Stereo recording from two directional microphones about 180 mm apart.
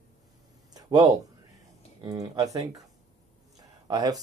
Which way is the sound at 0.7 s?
20° right (ahead or behind).